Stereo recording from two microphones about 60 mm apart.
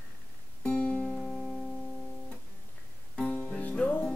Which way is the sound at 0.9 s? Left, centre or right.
Left.